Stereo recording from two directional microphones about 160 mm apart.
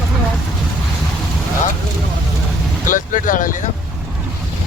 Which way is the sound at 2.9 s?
55° left (ahead or behind).